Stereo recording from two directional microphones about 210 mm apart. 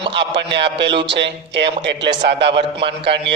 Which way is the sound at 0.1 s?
55° right (ahead or behind).